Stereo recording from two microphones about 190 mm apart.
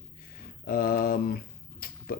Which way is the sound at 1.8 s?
50° left (ahead or behind).